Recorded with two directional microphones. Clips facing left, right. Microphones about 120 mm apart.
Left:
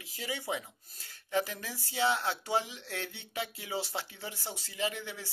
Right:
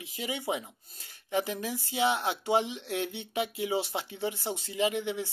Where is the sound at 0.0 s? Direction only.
20° right (ahead or behind).